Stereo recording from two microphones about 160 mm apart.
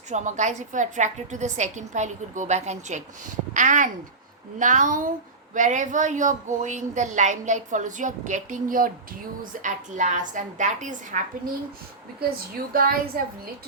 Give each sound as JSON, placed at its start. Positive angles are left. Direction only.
{"t": 0.1, "sound": "a woman's voice", "side_deg": -50}
{"t": 12.7, "sound": "a woman's voice", "side_deg": -65}